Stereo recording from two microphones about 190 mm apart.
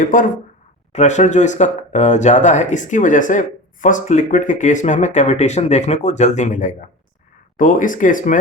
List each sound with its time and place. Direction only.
0.0 s speech: 45° left (ahead or behind)